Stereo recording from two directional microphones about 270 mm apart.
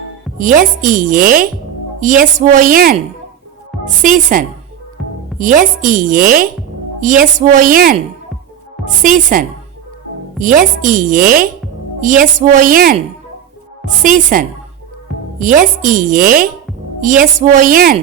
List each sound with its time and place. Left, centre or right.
0.3 s a woman's voice: right
9.0 s a woman's voice: right